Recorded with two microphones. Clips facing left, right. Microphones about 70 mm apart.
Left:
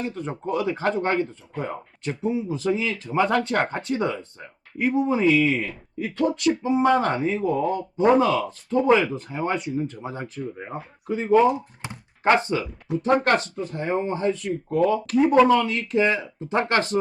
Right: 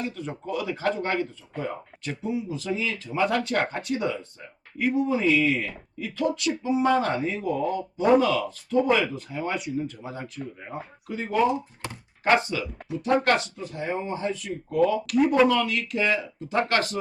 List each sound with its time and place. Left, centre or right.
0.0 s speech: left
6.0 s speech: left
15.2 s speech: left